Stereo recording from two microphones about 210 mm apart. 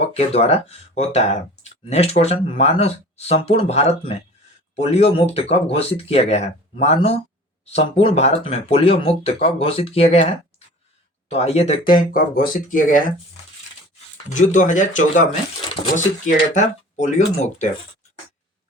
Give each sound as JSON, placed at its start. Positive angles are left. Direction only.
{"t": 0.1, "sound": "speech", "side_deg": 30}
{"t": 14.3, "sound": "speech", "side_deg": 35}